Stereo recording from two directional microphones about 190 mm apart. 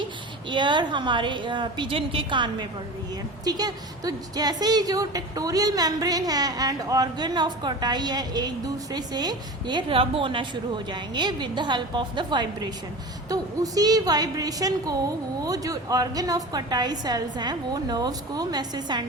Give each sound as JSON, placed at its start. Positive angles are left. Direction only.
{"t": 0.5, "sound": "a woman's voice", "side_deg": -25}